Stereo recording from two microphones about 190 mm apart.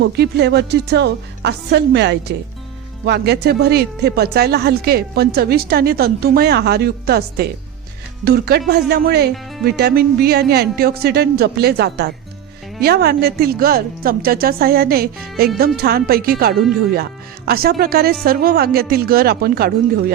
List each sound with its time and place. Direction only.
0.0 s a woman's voice: 60° right (ahead or behind)